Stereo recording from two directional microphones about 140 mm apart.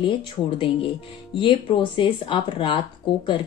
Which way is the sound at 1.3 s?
35° left (ahead or behind).